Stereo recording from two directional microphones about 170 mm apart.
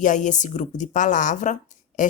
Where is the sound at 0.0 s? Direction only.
50° left (ahead or behind).